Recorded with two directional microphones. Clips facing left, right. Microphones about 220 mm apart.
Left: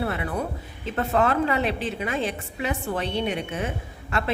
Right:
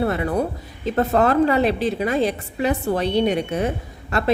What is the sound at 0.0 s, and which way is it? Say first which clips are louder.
A woman's voice: right 6 dB; 40° right (ahead or behind).